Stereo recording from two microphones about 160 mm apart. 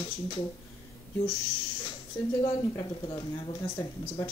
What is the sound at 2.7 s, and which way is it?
Speech, 30° left (ahead or behind).